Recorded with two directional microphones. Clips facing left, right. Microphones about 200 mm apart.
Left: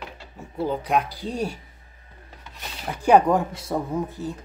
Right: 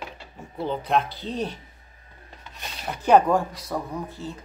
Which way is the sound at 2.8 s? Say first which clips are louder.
Left 1 dB; 10° left (ahead or behind).